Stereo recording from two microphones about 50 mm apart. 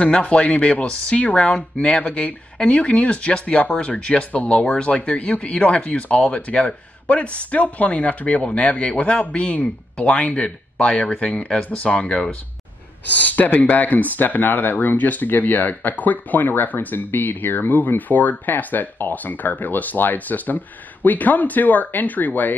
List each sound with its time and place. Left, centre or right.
0.0 s speech: left
13.2 s speech: left